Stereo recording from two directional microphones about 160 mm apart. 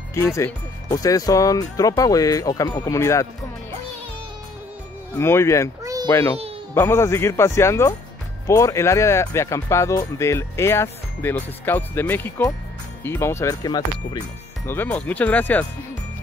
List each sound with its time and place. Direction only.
0.1 s speech: 15° left (ahead or behind)
5.1 s speech: 15° left (ahead or behind)
14.7 s speech: 10° left (ahead or behind)